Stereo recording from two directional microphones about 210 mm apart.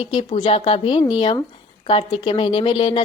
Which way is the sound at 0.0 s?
25° left (ahead or behind).